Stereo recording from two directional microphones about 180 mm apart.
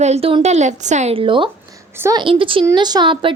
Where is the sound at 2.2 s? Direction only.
30° right (ahead or behind).